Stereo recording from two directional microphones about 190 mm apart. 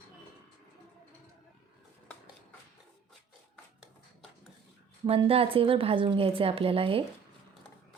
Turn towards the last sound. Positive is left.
turn(degrees=-30)  # may be behind; listen again after turning